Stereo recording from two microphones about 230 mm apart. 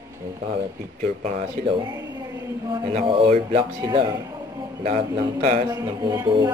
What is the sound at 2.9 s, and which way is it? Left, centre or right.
A man's voice, right.